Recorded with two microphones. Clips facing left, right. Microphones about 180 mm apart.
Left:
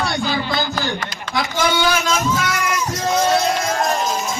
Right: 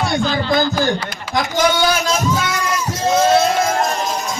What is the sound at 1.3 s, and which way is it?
Speech, 45° right (ahead or behind).